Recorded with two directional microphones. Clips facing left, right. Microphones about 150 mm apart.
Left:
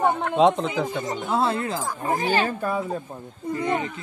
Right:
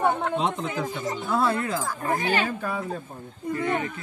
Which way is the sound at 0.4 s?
90° left.